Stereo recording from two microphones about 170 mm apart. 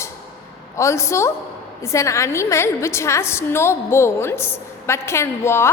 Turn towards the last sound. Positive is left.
turn(degrees=15)  # may be behind; listen again after turning